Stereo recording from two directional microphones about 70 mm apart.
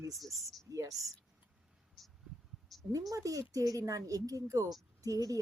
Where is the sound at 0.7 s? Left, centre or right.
Right.